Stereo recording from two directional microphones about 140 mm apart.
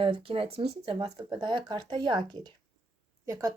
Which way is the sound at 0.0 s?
40° right (ahead or behind).